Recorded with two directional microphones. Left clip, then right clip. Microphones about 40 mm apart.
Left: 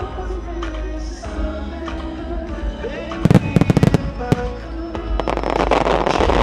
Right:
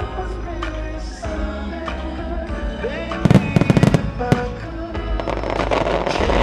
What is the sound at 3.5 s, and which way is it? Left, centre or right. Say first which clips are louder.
Music: even; left.